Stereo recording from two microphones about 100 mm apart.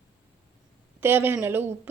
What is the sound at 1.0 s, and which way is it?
Speech, 20° right (ahead or behind).